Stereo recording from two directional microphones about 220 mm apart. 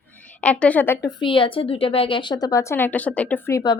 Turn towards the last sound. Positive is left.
turn(degrees=15)  # may be behind; listen again after turning